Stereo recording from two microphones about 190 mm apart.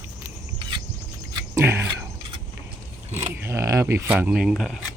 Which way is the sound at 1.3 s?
15° right (ahead or behind).